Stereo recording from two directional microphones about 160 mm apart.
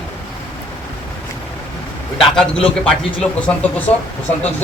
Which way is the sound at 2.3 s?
5° left (ahead or behind).